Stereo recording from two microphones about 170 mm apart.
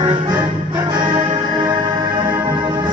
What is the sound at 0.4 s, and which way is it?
Music, 25° right (ahead or behind).